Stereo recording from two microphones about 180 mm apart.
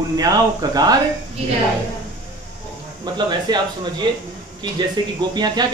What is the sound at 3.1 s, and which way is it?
Speech, 25° right (ahead or behind).